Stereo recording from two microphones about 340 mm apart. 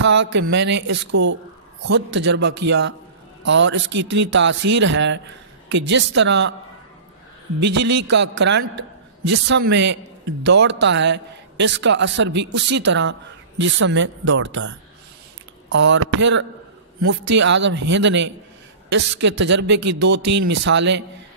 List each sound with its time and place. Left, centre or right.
0.0 s a man's voice: right
1.1 s speech: right
1.9 s a man's voice: right
8.1 s a man's voice: right